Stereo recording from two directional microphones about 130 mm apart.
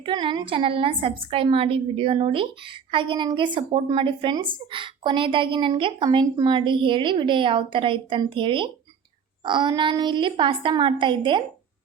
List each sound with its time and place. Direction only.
0.0 s a woman's voice: 40° right (ahead or behind)